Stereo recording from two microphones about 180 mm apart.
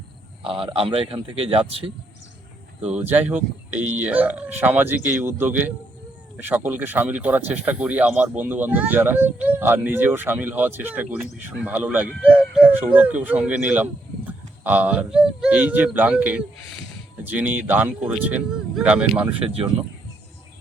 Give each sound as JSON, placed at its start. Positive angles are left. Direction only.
{"t": 0.4, "sound": "a man's voice", "side_deg": -30}
{"t": 2.8, "sound": "speech", "side_deg": -10}
{"t": 19.4, "sound": "a man's voice", "side_deg": -30}